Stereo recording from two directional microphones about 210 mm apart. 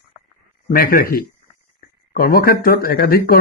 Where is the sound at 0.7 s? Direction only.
45° left (ahead or behind).